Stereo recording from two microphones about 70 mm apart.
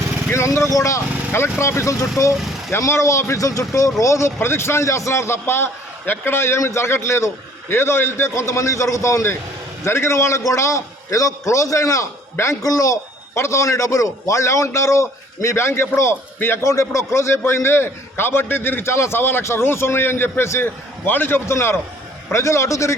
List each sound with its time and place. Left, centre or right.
0.3 s a man's voice: left